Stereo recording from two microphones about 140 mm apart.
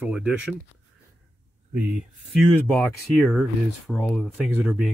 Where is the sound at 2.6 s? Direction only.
10° left (ahead or behind).